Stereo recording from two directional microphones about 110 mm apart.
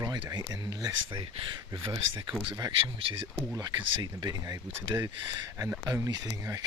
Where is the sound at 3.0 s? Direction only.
55° right (ahead or behind).